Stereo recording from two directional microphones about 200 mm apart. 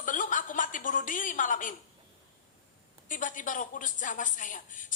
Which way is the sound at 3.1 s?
40° left (ahead or behind).